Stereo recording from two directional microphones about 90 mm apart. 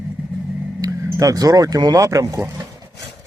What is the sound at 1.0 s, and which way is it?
Speech, 35° right (ahead or behind).